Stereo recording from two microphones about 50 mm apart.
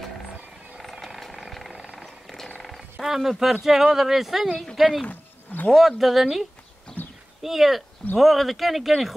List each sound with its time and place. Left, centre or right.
0.7 s vehicle: centre
2.0 s a sound: centre
2.8 s a sound: centre
3.6 s speech: centre
6.9 s horse: centre
7.4 s speech: centre